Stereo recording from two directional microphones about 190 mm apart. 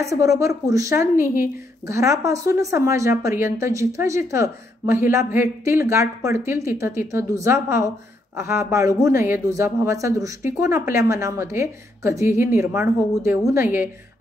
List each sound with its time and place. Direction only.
0.2 s a woman's voice: 15° right (ahead or behind)